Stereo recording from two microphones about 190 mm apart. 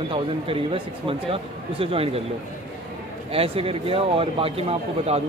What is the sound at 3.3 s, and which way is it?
A man's voice, 30° right (ahead or behind).